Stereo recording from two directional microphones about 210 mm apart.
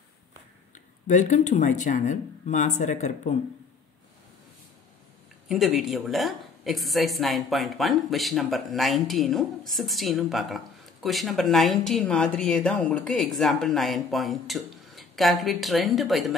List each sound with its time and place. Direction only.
0.7 s speech: 35° left (ahead or behind)
5.5 s a woman's voice: centre (ahead or behind)